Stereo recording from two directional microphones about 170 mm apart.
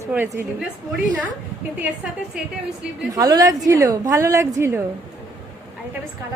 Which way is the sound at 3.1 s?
20° right (ahead or behind).